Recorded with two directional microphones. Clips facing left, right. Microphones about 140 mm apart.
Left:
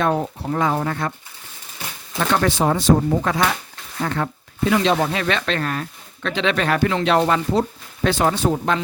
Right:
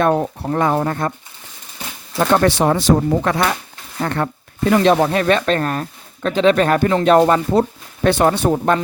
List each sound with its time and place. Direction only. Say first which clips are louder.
0.0 s speech: right 4 dB; 55° right (ahead or behind)
0.9 s speech: right 3 dB; 40° right (ahead or behind)
2.5 s speech: right 2 dB; 75° right (ahead or behind)
4.0 s speech: right 3 dB; 55° right (ahead or behind)
8.0 s speech: right 4 dB; 55° right (ahead or behind)